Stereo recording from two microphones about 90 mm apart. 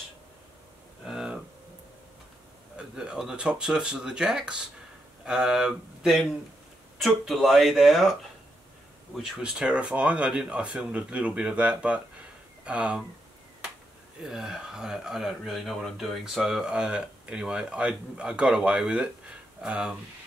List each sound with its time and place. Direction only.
1.0 s cattle: 5° right (ahead or behind)
3.0 s speech: 5° right (ahead or behind)
14.2 s speech: 5° right (ahead or behind)